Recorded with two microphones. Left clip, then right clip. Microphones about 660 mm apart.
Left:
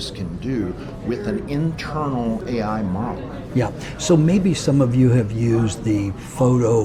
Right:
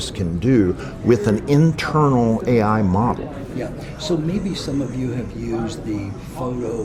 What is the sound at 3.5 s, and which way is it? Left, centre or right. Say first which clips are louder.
Speech: left 8 dB; left.